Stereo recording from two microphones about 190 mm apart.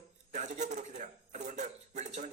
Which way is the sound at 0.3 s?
40° right (ahead or behind).